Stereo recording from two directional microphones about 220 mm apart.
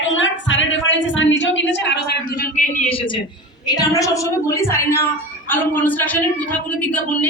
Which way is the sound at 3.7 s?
15° left (ahead or behind).